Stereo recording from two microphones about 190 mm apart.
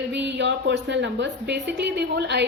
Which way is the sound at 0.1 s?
65° right (ahead or behind).